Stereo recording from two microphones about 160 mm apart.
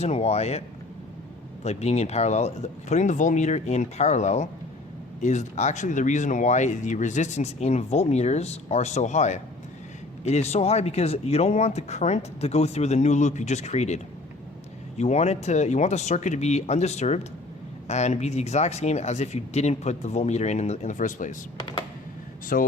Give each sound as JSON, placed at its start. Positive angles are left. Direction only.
{"t": 0.0, "sound": "speech", "side_deg": 40}
{"t": 1.6, "sound": "speech", "side_deg": 45}
{"t": 21.6, "sound": "computer keyboard", "side_deg": 30}
{"t": 22.5, "sound": "speech", "side_deg": 65}